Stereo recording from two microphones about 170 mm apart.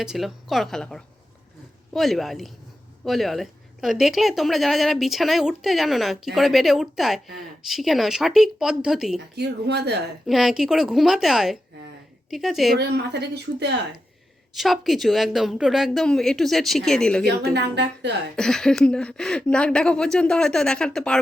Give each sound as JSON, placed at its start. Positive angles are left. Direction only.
{"t": 0.0, "sound": "speech", "side_deg": 0}
{"t": 9.3, "sound": "speech", "side_deg": -80}
{"t": 10.2, "sound": "speech", "side_deg": 0}
{"t": 12.7, "sound": "a woman's voice", "side_deg": -80}
{"t": 14.5, "sound": "speech", "side_deg": 0}
{"t": 17.5, "sound": "a woman's voice", "side_deg": -85}
{"t": 18.3, "sound": "speech", "side_deg": 5}